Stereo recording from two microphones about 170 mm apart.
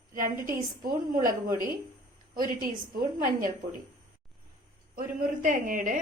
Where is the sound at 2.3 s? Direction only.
55° right (ahead or behind).